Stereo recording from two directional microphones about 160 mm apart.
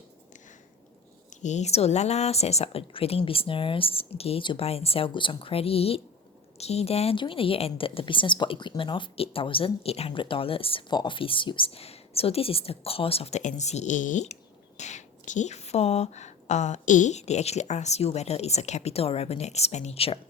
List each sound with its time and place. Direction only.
1.3 s a woman's voice: 50° left (ahead or behind)